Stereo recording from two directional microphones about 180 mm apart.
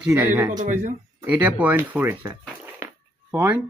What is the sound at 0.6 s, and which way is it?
Speech, 45° right (ahead or behind).